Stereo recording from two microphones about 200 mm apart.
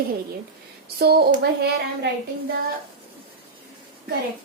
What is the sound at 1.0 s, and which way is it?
Speech, 50° right (ahead or behind).